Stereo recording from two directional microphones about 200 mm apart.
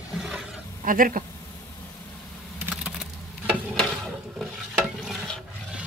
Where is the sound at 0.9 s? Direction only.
45° right (ahead or behind).